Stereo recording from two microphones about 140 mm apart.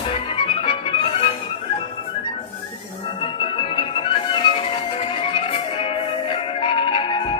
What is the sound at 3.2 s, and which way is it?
Music, 40° left (ahead or behind).